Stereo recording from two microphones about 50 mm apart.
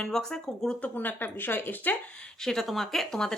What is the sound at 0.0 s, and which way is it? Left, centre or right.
Speech, centre.